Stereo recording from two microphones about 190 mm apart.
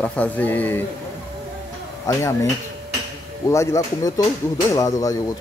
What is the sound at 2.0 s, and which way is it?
Speech, 15° left (ahead or behind).